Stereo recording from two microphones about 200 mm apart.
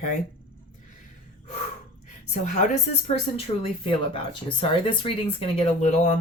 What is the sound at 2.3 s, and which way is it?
Speech, 35° left (ahead or behind).